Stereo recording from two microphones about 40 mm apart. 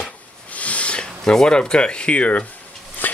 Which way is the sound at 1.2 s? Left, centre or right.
Centre.